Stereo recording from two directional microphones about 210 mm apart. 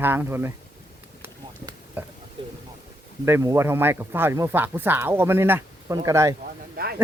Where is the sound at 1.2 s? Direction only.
10° right (ahead or behind).